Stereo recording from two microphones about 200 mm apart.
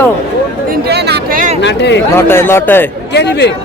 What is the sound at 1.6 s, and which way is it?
Speech, 60° left (ahead or behind).